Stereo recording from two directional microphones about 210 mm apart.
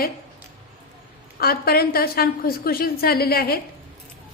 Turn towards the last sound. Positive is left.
turn(degrees=45)  # may be behind; listen again after turning